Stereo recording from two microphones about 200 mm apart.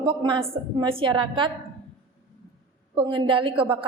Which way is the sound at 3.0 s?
25° right (ahead or behind).